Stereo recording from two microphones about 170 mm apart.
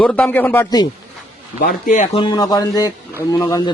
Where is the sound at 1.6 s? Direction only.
55° left (ahead or behind).